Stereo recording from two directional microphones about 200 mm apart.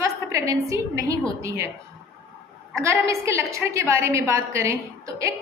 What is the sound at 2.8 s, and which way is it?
A woman's voice, 15° right (ahead or behind).